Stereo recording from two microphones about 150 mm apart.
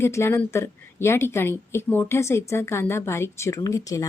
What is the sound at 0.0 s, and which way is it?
A woman's voice, 20° left (ahead or behind).